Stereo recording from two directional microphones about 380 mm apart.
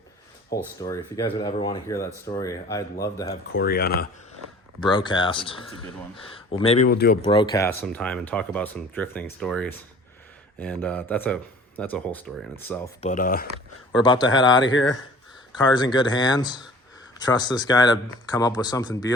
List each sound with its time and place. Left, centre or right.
0.8 s speech: centre
3.5 s speech: left
4.8 s speech: centre
7.3 s speech: centre
13.0 s speech: centre
13.9 s speech: centre
14.6 s speech: left
15.5 s speech: centre